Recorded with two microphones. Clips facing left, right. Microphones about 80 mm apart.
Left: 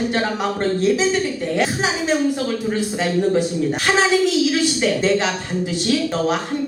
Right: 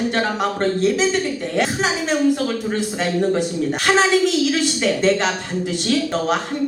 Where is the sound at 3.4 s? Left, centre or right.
Right.